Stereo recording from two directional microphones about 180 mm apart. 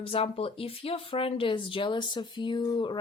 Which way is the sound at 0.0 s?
30° left (ahead or behind).